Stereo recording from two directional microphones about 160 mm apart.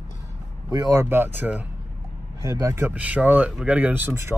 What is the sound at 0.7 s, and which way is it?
Speech, 20° right (ahead or behind).